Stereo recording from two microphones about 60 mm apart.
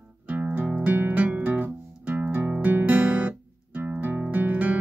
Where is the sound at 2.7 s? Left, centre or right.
Right.